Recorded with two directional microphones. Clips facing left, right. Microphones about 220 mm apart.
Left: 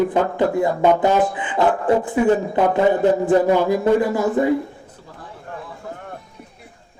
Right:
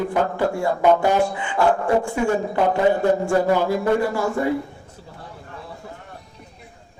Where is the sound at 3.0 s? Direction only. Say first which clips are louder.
Left 3 dB; 20° left (ahead or behind).